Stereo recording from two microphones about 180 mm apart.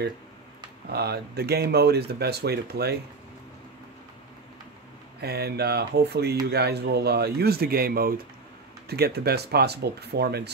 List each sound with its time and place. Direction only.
0.9 s speech: 65° right (ahead or behind)
5.2 s speech: 65° right (ahead or behind)